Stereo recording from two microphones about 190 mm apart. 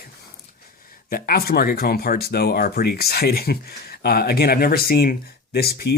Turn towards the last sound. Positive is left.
turn(degrees=55)  # may be behind; listen again after turning